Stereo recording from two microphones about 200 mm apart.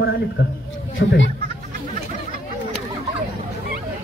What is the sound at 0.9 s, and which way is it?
Speech, 70° left (ahead or behind).